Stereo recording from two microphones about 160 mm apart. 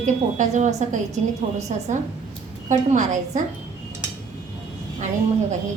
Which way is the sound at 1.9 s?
50° right (ahead or behind).